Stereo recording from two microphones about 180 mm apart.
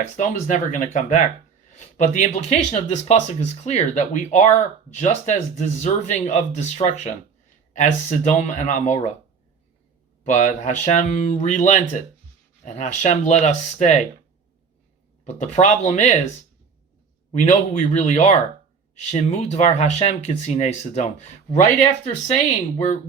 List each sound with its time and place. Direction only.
0.0 s speech: 40° left (ahead or behind)
10.2 s speech: 40° left (ahead or behind)
15.2 s speech: 40° left (ahead or behind)
17.3 s speech: 40° left (ahead or behind)